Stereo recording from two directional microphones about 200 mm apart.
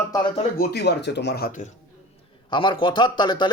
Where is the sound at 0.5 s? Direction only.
55° left (ahead or behind).